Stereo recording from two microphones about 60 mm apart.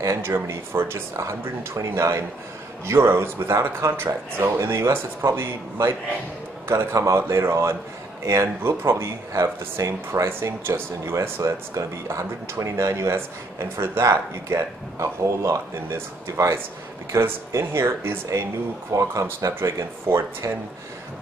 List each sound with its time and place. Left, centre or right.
0.0 s speech: right
6.9 s speech: right
18.9 s speech: right